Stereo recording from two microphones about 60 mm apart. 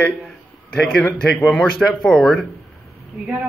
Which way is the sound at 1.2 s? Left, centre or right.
Centre.